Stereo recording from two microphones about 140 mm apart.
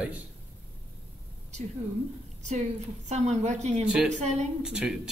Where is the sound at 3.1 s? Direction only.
55° right (ahead or behind).